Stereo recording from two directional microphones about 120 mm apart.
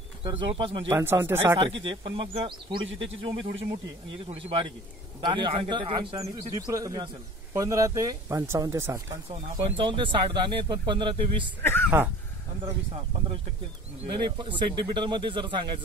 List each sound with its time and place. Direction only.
0.2 s speech: 50° right (ahead or behind)
0.8 s speech: 25° right (ahead or behind)
1.6 s speech: 45° right (ahead or behind)
6.1 s speech: 30° right (ahead or behind)
9.3 s speech: 40° right (ahead or behind)
11.6 s speech: 20° left (ahead or behind)
14.0 s speech: 40° right (ahead or behind)